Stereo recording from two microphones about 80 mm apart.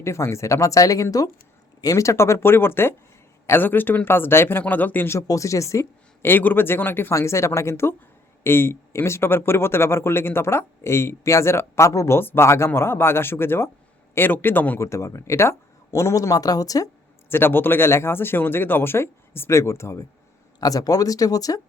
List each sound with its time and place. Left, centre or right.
0.0 s speech: left
5.0 s speech: left
6.2 s speech: left
7.1 s speech: left
14.8 s speech: left
17.2 s speech: left
20.6 s speech: left